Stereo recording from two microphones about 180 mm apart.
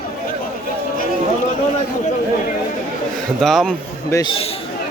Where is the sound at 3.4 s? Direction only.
Centre (ahead or behind).